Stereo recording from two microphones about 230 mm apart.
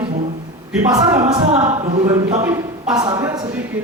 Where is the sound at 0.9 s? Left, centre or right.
Centre.